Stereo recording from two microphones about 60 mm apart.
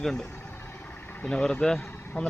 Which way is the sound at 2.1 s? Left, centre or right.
Left.